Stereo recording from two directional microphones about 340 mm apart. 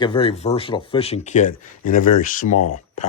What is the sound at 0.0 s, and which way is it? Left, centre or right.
Speech, centre.